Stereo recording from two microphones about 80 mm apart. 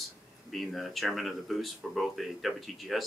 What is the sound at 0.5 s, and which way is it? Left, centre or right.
Speech, centre.